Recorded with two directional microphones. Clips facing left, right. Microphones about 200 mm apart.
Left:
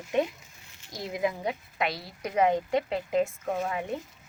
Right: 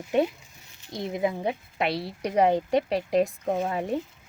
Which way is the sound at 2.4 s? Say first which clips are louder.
Right 3 dB; 35° right (ahead or behind).